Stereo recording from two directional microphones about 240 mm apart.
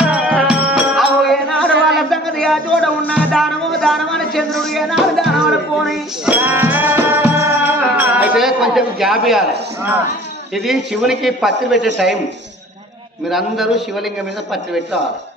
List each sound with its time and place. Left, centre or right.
0.0 s music: centre
1.7 s a sound: right
2.0 s music: centre
10.5 s a man's voice: centre
13.3 s a man's voice: centre